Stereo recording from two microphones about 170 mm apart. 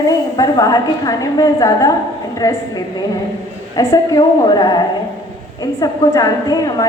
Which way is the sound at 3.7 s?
20° left (ahead or behind).